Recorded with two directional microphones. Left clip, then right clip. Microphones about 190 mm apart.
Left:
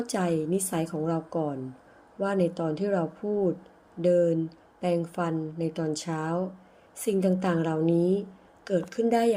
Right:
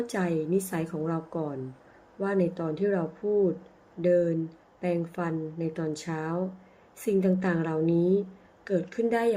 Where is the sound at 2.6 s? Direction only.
20° left (ahead or behind).